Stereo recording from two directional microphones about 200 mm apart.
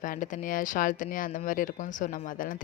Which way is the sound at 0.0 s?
40° left (ahead or behind).